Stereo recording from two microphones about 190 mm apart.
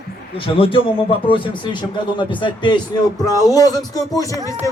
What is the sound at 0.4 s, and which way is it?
A man's voice, 30° left (ahead or behind).